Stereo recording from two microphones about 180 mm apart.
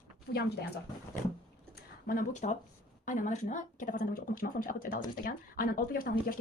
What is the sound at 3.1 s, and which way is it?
Speech, 45° left (ahead or behind).